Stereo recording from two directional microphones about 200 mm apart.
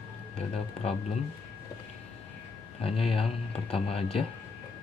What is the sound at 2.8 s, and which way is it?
Speech, 30° left (ahead or behind).